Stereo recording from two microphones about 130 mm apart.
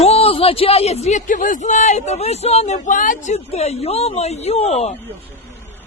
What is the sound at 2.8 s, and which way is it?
Speech, 90° left.